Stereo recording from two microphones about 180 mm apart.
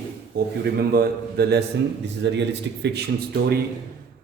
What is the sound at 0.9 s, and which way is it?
Speech, 60° right (ahead or behind).